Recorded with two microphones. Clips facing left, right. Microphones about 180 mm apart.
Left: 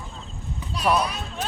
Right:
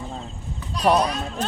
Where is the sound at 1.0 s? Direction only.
5° left (ahead or behind).